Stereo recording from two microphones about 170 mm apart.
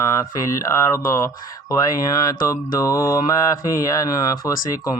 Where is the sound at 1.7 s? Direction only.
20° left (ahead or behind).